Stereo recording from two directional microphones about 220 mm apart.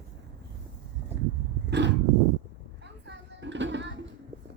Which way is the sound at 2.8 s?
50° right (ahead or behind).